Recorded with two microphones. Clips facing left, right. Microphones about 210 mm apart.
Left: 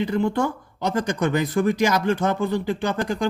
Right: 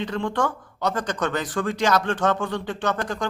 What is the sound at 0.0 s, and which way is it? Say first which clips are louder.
A man's voice: left 3 dB; 10° left (ahead or behind).